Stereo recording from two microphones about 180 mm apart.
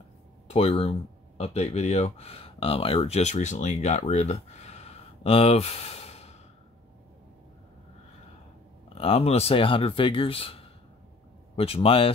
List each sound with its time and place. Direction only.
0.5 s speech: 35° left (ahead or behind)
8.8 s speech: 35° left (ahead or behind)